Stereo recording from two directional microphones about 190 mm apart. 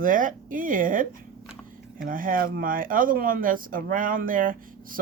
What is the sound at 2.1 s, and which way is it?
Speech, 45° right (ahead or behind).